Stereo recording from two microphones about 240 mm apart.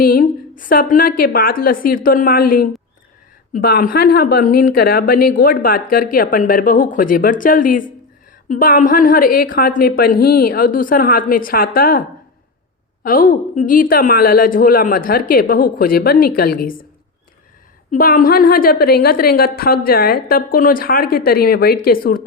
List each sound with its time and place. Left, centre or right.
0.0 s a woman's voice: left
17.9 s a woman's voice: left